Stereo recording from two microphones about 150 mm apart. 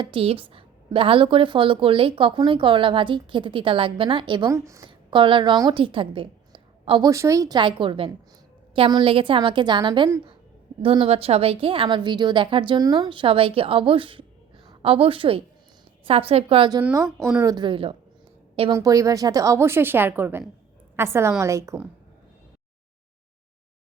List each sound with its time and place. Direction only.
0.0 s a woman's voice: 35° right (ahead or behind)
4.5 s speech: 20° right (ahead or behind)
4.9 s a woman's voice: 35° right (ahead or behind)
7.1 s a woman's voice: 20° right (ahead or behind)
17.2 s speech: centre (ahead or behind)
17.4 s a woman's voice: 30° right (ahead or behind)
18.7 s a woman's voice: 20° right (ahead or behind)